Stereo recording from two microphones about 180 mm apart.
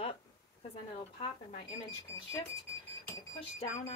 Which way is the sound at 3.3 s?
30° left (ahead or behind).